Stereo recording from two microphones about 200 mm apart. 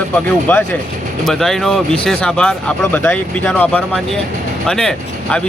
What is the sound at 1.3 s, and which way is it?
Speech, centre (ahead or behind).